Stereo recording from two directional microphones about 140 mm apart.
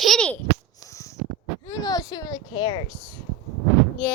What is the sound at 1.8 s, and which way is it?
Speech, 30° left (ahead or behind).